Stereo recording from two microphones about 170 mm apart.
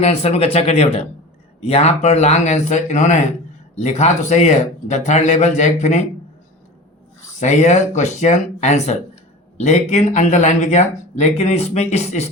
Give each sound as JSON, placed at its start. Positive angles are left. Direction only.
{"t": 0.0, "sound": "speech", "side_deg": 35}
{"t": 7.3, "sound": "speech", "side_deg": 45}